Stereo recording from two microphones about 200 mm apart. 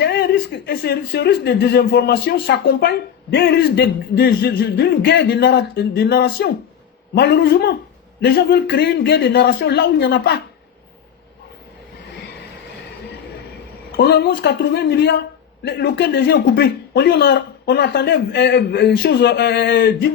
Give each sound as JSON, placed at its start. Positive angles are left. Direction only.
{"t": 0.0, "sound": "speech", "side_deg": 55}
{"t": 13.9, "sound": "speech", "side_deg": 55}